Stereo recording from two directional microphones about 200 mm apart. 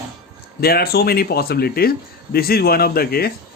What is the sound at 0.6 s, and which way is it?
A man's voice, 50° left (ahead or behind).